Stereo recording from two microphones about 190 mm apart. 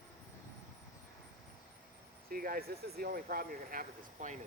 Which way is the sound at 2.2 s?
50° right (ahead or behind).